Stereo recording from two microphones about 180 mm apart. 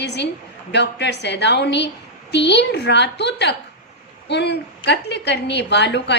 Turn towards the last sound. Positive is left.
turn(degrees=75)  # may be behind; listen again after turning